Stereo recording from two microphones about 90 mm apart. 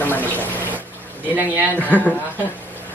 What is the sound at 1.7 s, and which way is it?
Speech, 15° left (ahead or behind).